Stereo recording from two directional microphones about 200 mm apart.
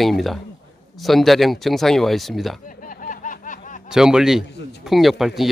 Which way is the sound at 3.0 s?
40° left (ahead or behind).